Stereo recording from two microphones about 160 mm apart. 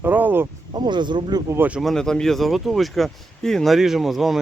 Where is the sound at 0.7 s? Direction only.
30° right (ahead or behind).